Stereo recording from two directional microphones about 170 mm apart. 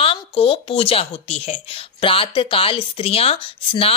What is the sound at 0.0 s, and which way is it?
Speech, 35° left (ahead or behind).